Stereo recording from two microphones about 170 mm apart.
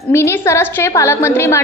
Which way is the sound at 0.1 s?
15° left (ahead or behind).